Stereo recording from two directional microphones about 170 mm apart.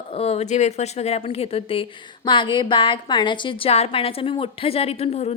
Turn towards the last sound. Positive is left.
turn(degrees=40)  # may be behind; listen again after turning